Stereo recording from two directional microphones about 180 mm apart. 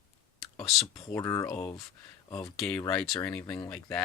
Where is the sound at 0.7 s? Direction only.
Centre (ahead or behind).